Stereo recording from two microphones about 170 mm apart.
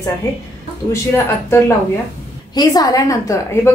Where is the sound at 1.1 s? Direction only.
15° left (ahead or behind).